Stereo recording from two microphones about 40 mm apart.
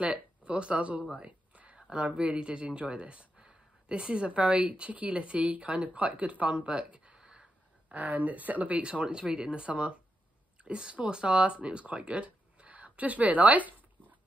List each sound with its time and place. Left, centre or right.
0.0 s speech: right
1.1 s a sound: right
1.8 s speech: right
7.9 s speech: right